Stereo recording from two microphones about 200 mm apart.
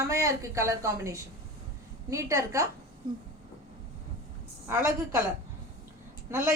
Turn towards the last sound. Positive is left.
turn(degrees=-15)  # may be behind; listen again after turning